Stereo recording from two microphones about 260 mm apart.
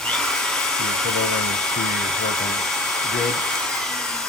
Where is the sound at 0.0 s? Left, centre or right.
Centre.